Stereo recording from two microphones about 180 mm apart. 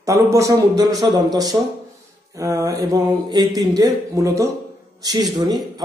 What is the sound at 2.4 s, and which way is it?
A man's voice, 20° right (ahead or behind).